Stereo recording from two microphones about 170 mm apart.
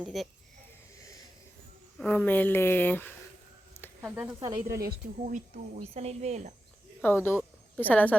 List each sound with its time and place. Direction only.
0.0 s speech: centre (ahead or behind)
1.0 s wheeze: 20° left (ahead or behind)
2.0 s speech: 10° left (ahead or behind)
4.0 s speech: 10° right (ahead or behind)
4.4 s speech: 20° right (ahead or behind)
4.9 s speech: 45° right (ahead or behind)
7.0 s speech: 10° left (ahead or behind)